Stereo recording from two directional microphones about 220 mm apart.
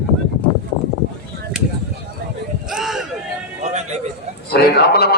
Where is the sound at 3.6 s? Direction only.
30° right (ahead or behind).